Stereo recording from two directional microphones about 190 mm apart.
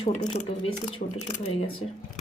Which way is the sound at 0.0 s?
35° left (ahead or behind).